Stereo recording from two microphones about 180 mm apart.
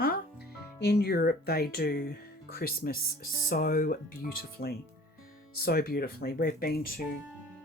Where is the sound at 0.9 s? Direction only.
60° left (ahead or behind).